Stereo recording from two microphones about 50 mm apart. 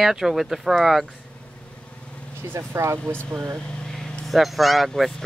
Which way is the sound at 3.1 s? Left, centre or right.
Right.